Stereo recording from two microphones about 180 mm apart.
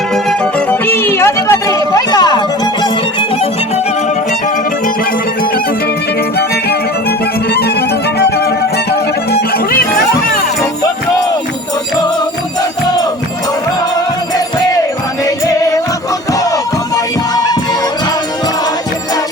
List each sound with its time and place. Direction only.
0.3 s music: 10° left (ahead or behind)
7.5 s music: 60° left (ahead or behind)